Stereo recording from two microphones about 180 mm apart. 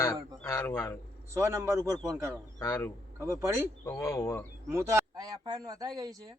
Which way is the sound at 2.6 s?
15° left (ahead or behind).